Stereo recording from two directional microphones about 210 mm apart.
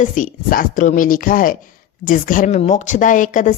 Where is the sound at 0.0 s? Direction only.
40° left (ahead or behind).